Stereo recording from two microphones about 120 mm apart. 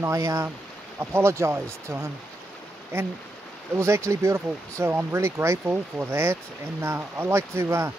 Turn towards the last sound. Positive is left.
turn(degrees=-20)  # may be behind; listen again after turning